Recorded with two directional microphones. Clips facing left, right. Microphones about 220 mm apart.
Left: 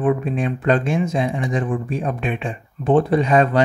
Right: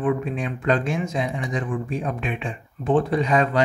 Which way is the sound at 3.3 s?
55° left (ahead or behind).